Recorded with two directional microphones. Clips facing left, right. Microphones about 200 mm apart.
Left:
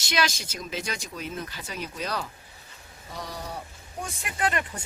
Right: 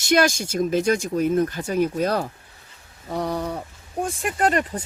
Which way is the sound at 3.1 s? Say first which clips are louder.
Right 11 dB; 60° right (ahead or behind).